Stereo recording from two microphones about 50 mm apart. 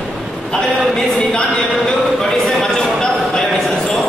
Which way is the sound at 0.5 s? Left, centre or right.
Centre.